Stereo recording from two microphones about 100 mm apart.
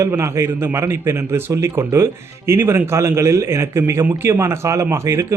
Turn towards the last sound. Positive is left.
turn(degrees=-30)  # may be behind; listen again after turning